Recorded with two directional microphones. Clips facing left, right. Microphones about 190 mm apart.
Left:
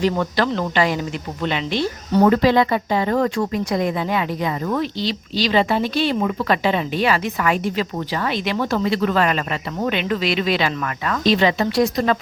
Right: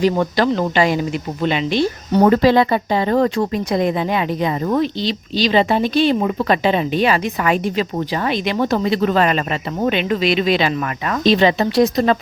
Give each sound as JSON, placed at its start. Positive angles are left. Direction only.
{"t": 0.0, "sound": "speech", "side_deg": -15}
{"t": 2.2, "sound": "speech", "side_deg": -35}